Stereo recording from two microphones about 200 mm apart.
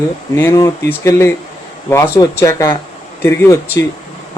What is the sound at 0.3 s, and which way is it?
Speech, 15° left (ahead or behind).